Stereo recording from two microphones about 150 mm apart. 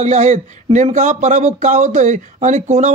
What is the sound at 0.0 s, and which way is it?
Speech, 50° right (ahead or behind).